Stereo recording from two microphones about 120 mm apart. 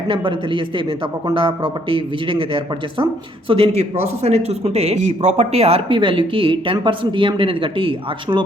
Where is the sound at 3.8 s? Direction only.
60° right (ahead or behind).